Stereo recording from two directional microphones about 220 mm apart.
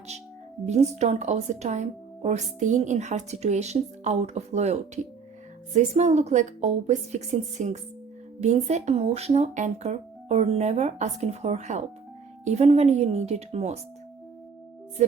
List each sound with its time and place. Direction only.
0.6 s a woman's voice: 30° right (ahead or behind)